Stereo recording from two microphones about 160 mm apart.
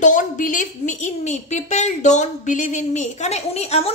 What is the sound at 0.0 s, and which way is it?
A woman's voice, 55° left (ahead or behind).